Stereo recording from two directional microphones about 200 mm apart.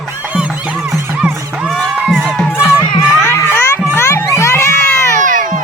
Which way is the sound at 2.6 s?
10° right (ahead or behind).